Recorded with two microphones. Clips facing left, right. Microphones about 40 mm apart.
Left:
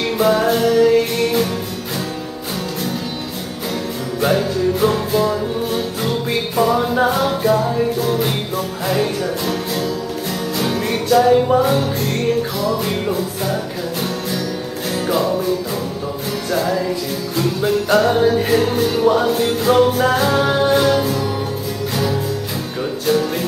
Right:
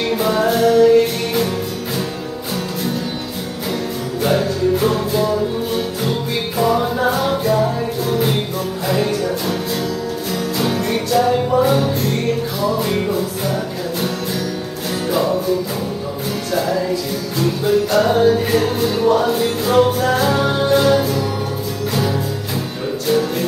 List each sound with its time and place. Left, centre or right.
0.0 s music: centre
4.3 s music: centre
10.6 s music: centre
16.5 s music: centre
17.9 s music: centre
20.8 s music: centre